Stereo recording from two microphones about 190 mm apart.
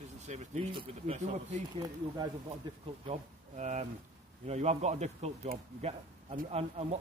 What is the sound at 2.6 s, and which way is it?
Speech, 25° right (ahead or behind).